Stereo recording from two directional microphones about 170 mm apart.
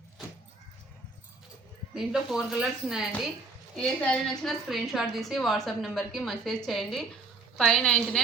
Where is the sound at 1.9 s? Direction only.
5° right (ahead or behind).